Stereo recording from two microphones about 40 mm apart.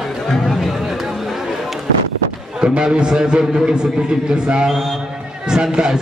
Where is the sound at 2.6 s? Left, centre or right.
Right.